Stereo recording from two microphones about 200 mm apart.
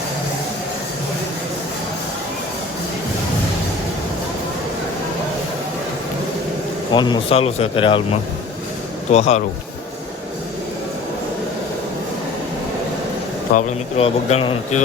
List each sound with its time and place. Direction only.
6.9 s speech: 20° left (ahead or behind)
13.5 s speech: 40° left (ahead or behind)